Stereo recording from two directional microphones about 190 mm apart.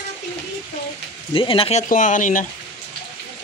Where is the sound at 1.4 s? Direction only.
30° left (ahead or behind).